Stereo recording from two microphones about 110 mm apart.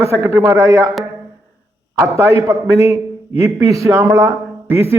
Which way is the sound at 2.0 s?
30° right (ahead or behind).